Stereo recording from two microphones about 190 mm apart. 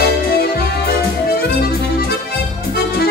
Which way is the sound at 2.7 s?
55° left (ahead or behind).